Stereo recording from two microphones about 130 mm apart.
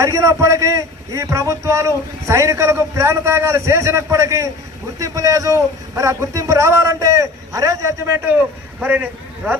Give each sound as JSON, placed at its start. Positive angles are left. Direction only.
{"t": 0.0, "sound": "a man's voice", "side_deg": -25}